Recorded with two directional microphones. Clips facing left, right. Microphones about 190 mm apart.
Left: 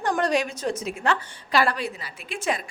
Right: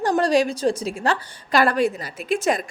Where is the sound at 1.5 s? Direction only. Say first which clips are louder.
Right 5 dB; 45° right (ahead or behind).